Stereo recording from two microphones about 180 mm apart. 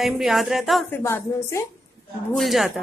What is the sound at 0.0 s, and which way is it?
Speech, centre (ahead or behind).